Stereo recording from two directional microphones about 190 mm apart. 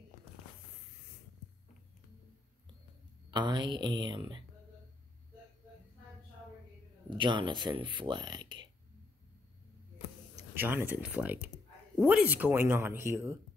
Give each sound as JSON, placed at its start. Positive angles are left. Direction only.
{"t": 3.3, "sound": "speech", "side_deg": -25}
{"t": 7.1, "sound": "speech", "side_deg": -25}
{"t": 10.5, "sound": "speech", "side_deg": -10}